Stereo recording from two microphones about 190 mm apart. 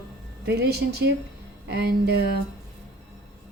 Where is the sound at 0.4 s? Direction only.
60° right (ahead or behind).